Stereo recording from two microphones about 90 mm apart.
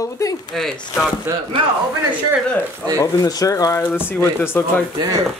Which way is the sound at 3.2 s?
40° left (ahead or behind).